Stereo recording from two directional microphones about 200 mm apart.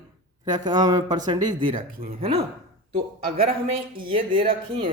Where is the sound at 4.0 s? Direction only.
25° right (ahead or behind).